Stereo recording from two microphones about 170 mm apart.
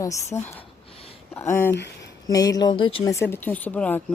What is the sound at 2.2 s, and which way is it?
Speech, 20° left (ahead or behind).